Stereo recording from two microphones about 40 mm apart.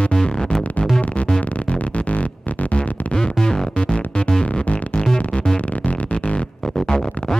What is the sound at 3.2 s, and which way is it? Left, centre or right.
Music, centre.